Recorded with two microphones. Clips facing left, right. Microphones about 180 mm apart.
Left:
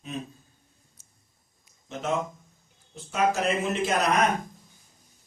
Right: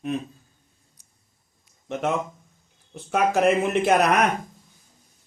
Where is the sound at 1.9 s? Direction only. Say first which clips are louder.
Right 7 dB; 60° right (ahead or behind).